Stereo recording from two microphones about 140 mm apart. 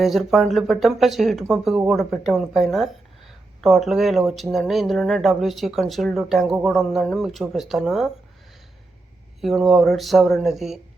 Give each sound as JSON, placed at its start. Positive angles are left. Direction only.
{"t": 0.0, "sound": "speech", "side_deg": 0}
{"t": 9.4, "sound": "speech", "side_deg": 0}